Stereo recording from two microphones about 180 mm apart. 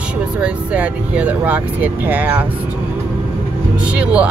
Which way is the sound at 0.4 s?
5° right (ahead or behind).